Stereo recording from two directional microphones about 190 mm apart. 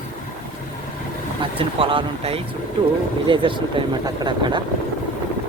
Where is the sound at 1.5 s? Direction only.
30° right (ahead or behind).